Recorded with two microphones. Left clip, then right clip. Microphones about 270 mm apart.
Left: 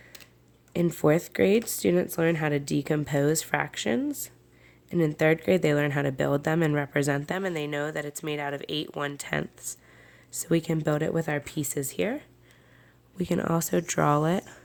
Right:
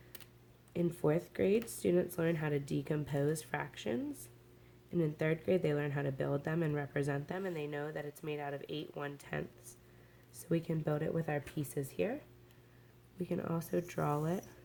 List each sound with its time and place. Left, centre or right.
0.7 s speech: left
13.1 s speech: left